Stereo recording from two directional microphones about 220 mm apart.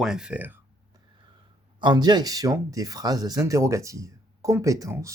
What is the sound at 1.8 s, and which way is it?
Speech, 20° right (ahead or behind).